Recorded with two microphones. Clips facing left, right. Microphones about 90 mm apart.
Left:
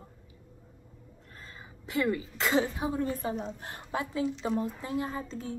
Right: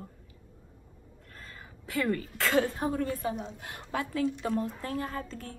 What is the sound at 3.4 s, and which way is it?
Speech, 35° left (ahead or behind).